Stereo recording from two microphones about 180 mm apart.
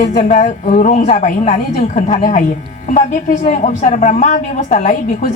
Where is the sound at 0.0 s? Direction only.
40° left (ahead or behind).